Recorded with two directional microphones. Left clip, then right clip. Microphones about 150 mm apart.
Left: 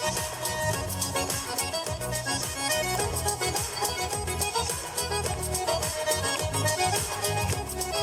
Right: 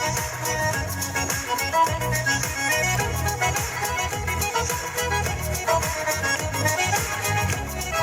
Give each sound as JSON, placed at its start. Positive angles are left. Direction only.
{"t": 0.0, "sound": "music", "side_deg": 35}
{"t": 4.5, "sound": "music", "side_deg": 35}